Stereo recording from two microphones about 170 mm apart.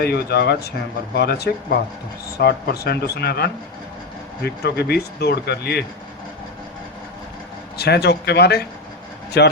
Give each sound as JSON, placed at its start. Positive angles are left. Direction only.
{"t": 0.0, "sound": "speech", "side_deg": 70}
{"t": 7.8, "sound": "speech", "side_deg": 75}